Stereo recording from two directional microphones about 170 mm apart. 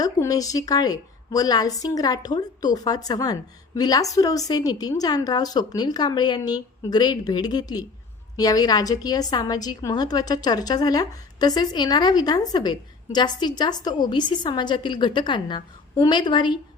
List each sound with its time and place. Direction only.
0.0 s a woman's voice: 20° left (ahead or behind)